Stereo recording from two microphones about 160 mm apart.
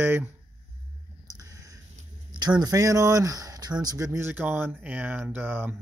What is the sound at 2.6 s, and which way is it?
Speech, 20° right (ahead or behind).